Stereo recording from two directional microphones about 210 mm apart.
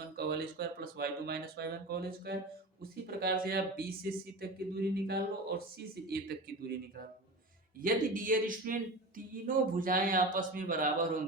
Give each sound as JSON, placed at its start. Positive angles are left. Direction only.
{"t": 0.2, "sound": "speech", "side_deg": -50}
{"t": 7.8, "sound": "speech", "side_deg": -40}